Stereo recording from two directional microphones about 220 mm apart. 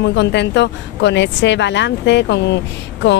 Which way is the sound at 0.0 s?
50° left (ahead or behind).